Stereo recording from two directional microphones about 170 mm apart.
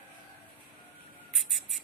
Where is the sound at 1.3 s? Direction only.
Centre (ahead or behind).